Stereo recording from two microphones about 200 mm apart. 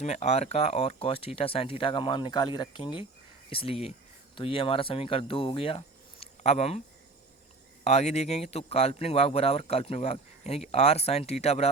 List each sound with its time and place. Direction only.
0.0 s speech: 35° left (ahead or behind)
7.9 s speech: 35° left (ahead or behind)